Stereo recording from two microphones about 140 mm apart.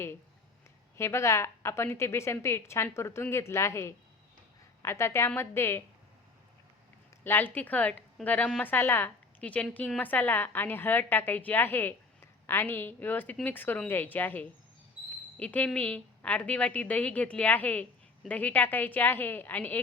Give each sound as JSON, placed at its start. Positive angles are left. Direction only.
{"t": 0.9, "sound": "a woman's voice", "side_deg": 20}
{"t": 7.3, "sound": "a woman's voice", "side_deg": 15}